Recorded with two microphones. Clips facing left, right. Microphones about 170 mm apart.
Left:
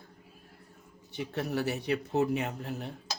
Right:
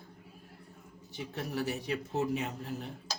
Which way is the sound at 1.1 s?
65° left (ahead or behind).